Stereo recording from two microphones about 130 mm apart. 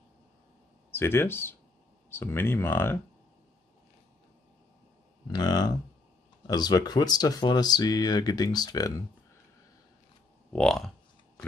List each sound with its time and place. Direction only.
0.9 s speech: 20° left (ahead or behind)
5.3 s speech: 30° left (ahead or behind)
10.5 s speech: 5° left (ahead or behind)